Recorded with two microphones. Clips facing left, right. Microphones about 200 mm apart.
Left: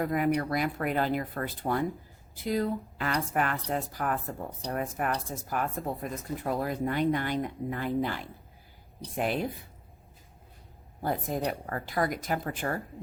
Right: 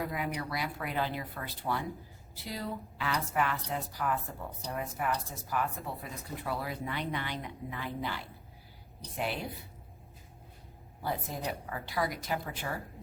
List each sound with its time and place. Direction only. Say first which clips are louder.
0.0 s speech: left 8 dB; 50° left (ahead or behind)
11.0 s speech: left 6 dB; 50° left (ahead or behind)